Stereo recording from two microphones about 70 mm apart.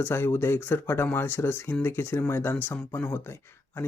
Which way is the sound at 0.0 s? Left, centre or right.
Left.